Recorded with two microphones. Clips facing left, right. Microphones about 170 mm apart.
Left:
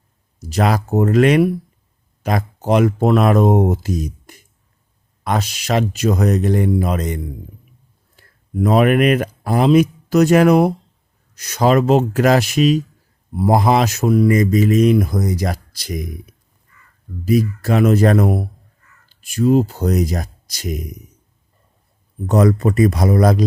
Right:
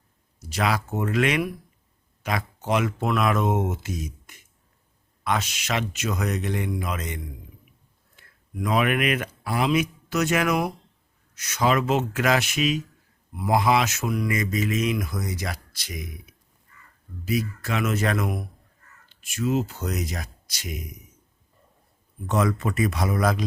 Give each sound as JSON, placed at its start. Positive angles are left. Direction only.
{"t": 0.5, "sound": "speech", "side_deg": 40}
{"t": 17.2, "sound": "speech", "side_deg": 40}
{"t": 22.3, "sound": "speech", "side_deg": 40}